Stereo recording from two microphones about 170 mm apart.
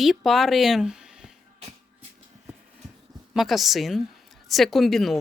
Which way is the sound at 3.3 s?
Centre (ahead or behind).